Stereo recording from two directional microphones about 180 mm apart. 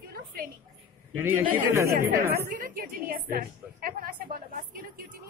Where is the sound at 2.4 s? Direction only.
50° right (ahead or behind).